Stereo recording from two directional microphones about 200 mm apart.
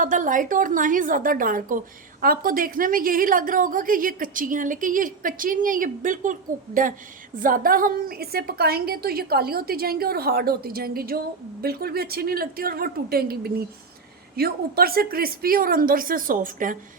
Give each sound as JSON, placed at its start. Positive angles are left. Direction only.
{"t": 0.0, "sound": "a woman's voice", "side_deg": -40}